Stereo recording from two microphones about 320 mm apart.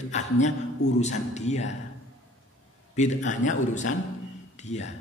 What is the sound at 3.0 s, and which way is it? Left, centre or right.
A man's voice, left.